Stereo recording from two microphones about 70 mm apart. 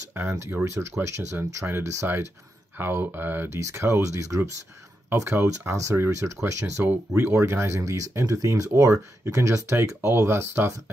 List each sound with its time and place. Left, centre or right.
0.1 s speech: right
2.8 s speech: right
3.5 s speech: right